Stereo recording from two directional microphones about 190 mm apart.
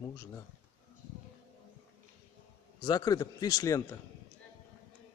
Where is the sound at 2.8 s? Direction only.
20° left (ahead or behind).